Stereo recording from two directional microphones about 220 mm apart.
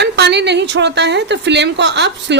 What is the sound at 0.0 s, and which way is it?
A woman's voice, 50° right (ahead or behind).